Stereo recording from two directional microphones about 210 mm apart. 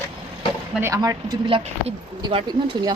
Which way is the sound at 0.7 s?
10° right (ahead or behind).